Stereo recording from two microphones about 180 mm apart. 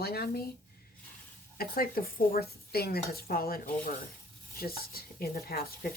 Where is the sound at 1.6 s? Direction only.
55° left (ahead or behind).